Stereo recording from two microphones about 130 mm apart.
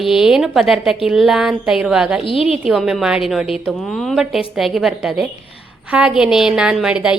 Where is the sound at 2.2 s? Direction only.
45° left (ahead or behind).